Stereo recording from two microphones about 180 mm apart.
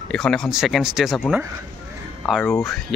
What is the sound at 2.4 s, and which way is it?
Speech, 15° left (ahead or behind).